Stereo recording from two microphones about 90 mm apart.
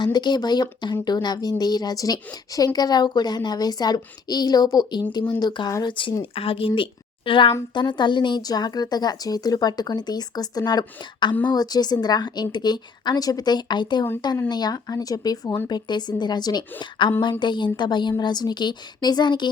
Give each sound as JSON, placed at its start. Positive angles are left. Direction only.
{"t": 0.0, "sound": "speech", "side_deg": 55}
{"t": 5.8, "sound": "speech", "side_deg": 65}
{"t": 6.3, "sound": "a woman's voice", "side_deg": 90}
{"t": 7.7, "sound": "speech", "side_deg": 60}
{"t": 17.0, "sound": "speech", "side_deg": 65}